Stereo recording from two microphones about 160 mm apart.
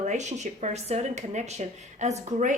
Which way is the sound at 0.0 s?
45° right (ahead or behind).